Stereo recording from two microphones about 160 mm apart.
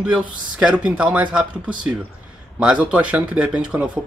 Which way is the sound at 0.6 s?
5° right (ahead or behind).